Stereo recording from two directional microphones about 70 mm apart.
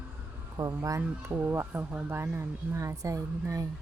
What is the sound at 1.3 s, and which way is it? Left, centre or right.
Speech, right.